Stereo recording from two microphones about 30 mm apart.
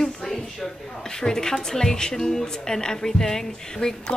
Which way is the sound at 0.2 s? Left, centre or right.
Centre.